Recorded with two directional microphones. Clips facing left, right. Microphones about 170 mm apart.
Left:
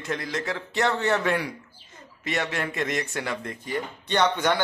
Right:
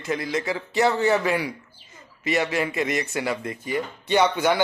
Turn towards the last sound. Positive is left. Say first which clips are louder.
# right 3 dB
turn(degrees=-10)  # may be behind; listen again after turning